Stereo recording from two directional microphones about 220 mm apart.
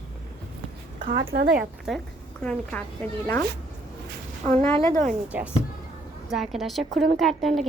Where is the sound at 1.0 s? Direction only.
45° right (ahead or behind).